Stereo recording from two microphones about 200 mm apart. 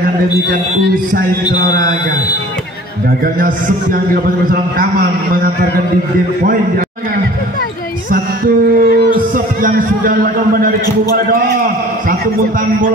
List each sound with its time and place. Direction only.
3.3 s a man's voice: 45° right (ahead or behind)
8.7 s speech: 45° right (ahead or behind)